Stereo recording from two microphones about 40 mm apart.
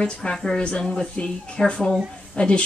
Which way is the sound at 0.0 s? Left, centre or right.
Centre.